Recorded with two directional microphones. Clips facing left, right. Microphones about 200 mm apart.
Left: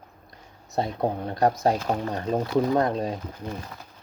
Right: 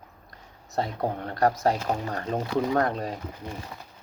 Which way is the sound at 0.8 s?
15° left (ahead or behind).